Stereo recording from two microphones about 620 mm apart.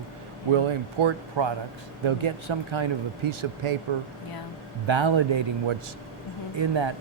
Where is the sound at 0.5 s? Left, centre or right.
Right.